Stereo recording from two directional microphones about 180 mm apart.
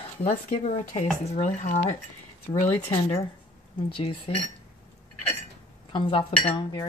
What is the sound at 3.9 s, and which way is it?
Speech, 30° left (ahead or behind).